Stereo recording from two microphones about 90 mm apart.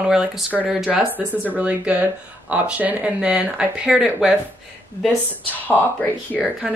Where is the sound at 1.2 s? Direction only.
20° right (ahead or behind).